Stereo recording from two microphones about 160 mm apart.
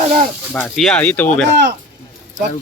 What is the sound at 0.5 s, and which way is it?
Speech, 5° left (ahead or behind).